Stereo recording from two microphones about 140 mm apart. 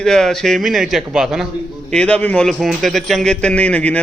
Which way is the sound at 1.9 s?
5° left (ahead or behind).